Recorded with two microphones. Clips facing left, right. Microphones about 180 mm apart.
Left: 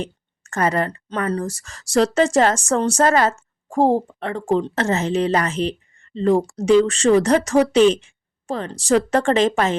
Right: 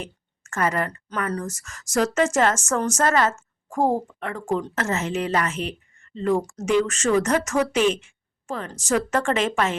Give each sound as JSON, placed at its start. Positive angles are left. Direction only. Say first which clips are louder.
{"t": 0.0, "sound": "speech", "louder": "left 7 dB", "side_deg": 35}